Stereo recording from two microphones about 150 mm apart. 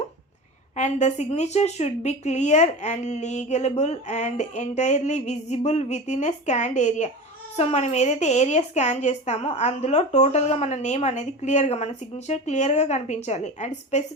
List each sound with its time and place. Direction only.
0.8 s a woman's voice: 50° left (ahead or behind)